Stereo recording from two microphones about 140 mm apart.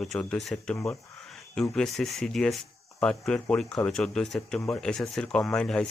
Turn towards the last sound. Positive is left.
turn(degrees=5)  # may be behind; listen again after turning